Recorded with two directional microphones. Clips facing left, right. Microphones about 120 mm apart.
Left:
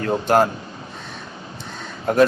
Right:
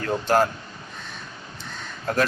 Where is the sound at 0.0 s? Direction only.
25° left (ahead or behind).